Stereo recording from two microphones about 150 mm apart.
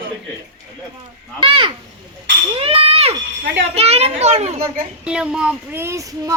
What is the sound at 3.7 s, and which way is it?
Speech, 45° right (ahead or behind).